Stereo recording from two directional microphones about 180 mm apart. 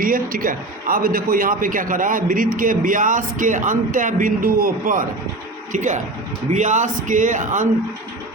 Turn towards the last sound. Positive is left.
turn(degrees=-45)  # may be behind; listen again after turning